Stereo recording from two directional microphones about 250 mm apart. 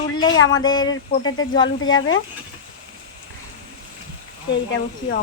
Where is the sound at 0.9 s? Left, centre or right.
Left.